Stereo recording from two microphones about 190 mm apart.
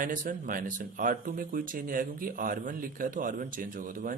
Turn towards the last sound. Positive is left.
turn(degrees=-45)  # may be behind; listen again after turning